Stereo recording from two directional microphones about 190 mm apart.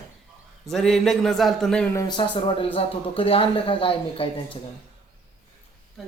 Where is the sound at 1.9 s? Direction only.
20° left (ahead or behind).